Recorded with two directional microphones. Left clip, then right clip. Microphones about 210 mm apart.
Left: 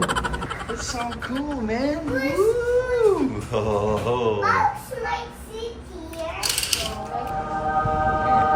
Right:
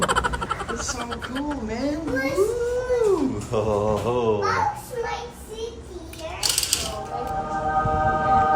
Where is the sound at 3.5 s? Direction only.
20° right (ahead or behind).